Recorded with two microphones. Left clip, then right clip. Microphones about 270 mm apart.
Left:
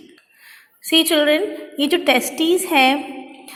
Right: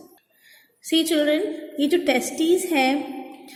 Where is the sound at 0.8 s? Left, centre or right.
Centre.